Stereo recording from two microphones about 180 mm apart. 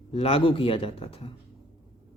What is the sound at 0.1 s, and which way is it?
Speech, 35° left (ahead or behind).